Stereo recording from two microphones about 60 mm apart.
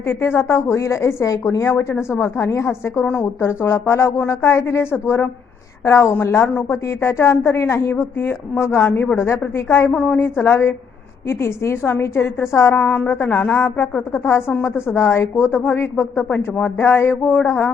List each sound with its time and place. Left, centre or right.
0.1 s a woman's voice: left
12.7 s a woman's voice: left
14.3 s a woman's voice: left
17.2 s speech: left